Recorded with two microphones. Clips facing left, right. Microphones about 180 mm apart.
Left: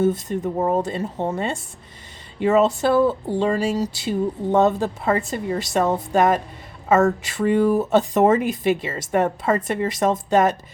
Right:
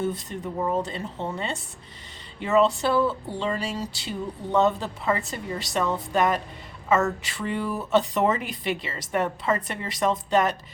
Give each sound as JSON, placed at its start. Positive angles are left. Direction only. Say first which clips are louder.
{"t": 0.0, "sound": "speech", "louder": "left 8 dB", "side_deg": 45}